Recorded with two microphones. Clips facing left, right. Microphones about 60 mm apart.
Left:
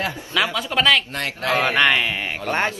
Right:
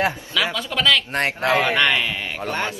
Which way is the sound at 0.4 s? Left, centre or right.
Left.